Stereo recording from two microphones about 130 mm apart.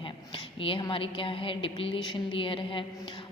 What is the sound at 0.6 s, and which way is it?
A woman's voice, 40° left (ahead or behind).